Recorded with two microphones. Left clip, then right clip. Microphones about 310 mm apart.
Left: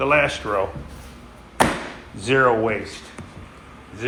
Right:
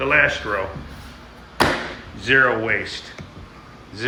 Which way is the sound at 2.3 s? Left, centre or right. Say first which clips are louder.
Right 1 dB; centre.